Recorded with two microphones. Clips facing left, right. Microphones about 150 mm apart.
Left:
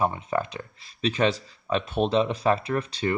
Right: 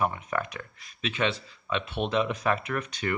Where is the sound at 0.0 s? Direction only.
30° left (ahead or behind).